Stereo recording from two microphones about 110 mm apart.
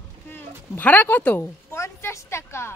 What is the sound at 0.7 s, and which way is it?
A woman's voice, 15° left (ahead or behind).